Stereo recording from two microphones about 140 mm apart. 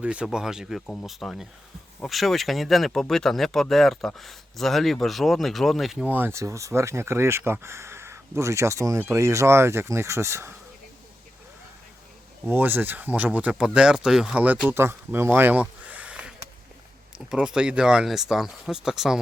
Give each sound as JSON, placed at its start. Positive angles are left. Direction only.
{"t": 0.0, "sound": "speech", "side_deg": -10}
{"t": 6.1, "sound": "speech", "side_deg": -15}
{"t": 12.5, "sound": "speech", "side_deg": -15}
{"t": 17.3, "sound": "speech", "side_deg": -5}